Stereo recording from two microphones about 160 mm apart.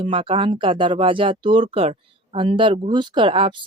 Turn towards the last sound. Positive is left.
turn(degrees=-30)  # may be behind; listen again after turning